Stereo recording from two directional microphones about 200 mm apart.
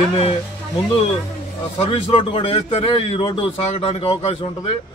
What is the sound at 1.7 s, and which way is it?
A man's voice, 30° left (ahead or behind).